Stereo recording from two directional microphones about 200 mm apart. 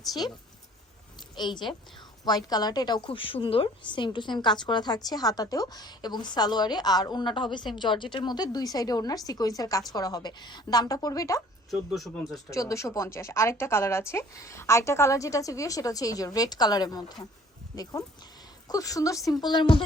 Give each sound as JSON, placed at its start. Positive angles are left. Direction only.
{"t": 0.1, "sound": "a woman's voice", "side_deg": 20}
{"t": 1.4, "sound": "a woman's voice", "side_deg": 25}
{"t": 11.7, "sound": "speech", "side_deg": 0}
{"t": 12.5, "sound": "a woman's voice", "side_deg": 15}
{"t": 18.7, "sound": "a woman's voice", "side_deg": 15}